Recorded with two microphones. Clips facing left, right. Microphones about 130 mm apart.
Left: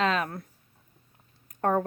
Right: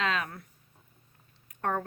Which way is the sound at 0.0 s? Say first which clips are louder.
Left 5 dB; 35° left (ahead or behind).